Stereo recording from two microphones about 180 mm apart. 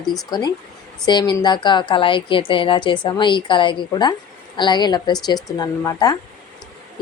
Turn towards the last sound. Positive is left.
turn(degrees=20)  # may be behind; listen again after turning